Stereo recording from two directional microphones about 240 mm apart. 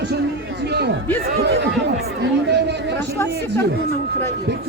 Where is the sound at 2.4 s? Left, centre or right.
Right.